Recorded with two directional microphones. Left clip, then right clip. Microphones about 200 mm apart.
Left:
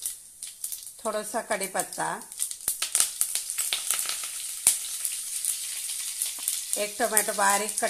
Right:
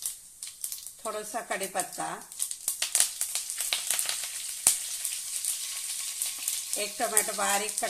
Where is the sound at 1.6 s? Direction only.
25° left (ahead or behind).